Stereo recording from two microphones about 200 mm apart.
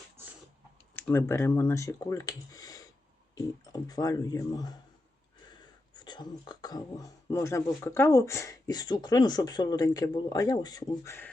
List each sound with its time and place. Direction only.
0.9 s speech: 10° left (ahead or behind)
5.9 s speech: 20° left (ahead or behind)